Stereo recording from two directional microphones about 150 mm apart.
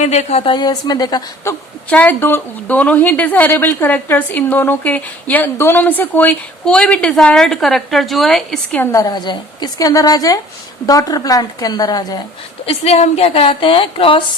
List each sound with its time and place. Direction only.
0.0 s speech: 50° left (ahead or behind)
0.5 s a woman's voice: 25° left (ahead or behind)
1.9 s a woman's voice: 10° left (ahead or behind)
8.8 s a woman's voice: 20° left (ahead or behind)
12.6 s a woman's voice: 45° left (ahead or behind)